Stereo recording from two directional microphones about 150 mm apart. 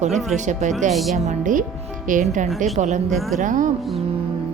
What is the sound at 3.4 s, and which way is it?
Speech, 60° right (ahead or behind).